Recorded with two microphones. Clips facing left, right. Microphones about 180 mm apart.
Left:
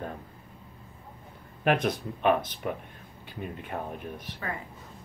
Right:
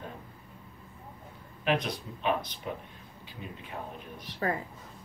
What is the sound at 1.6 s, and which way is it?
Speech, 50° left (ahead or behind).